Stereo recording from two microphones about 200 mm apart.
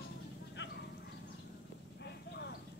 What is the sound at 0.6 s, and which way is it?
Clip-clop, 60° left (ahead or behind).